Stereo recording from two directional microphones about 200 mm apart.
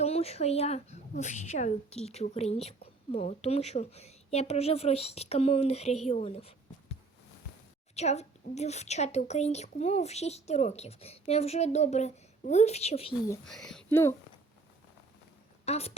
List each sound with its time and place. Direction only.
0.0 s a woman's voice: 30° left (ahead or behind)
7.9 s a woman's voice: 35° left (ahead or behind)
13.5 s speech: 5° left (ahead or behind)
15.6 s a woman's voice: 30° left (ahead or behind)